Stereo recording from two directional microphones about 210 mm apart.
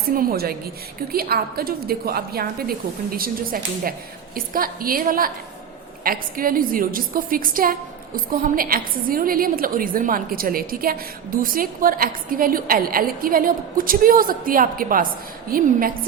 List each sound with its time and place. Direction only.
0.2 s a woman's voice: 45° right (ahead or behind)